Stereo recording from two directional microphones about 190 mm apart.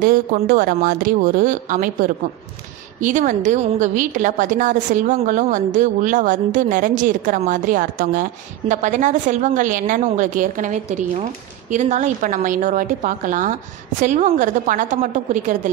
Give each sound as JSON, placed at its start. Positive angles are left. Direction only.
{"t": 0.0, "sound": "a woman's voice", "side_deg": -45}